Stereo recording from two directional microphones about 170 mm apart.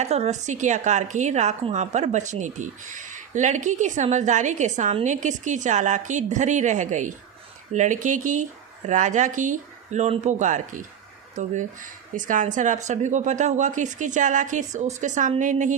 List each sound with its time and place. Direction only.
0.0 s speech: 40° right (ahead or behind)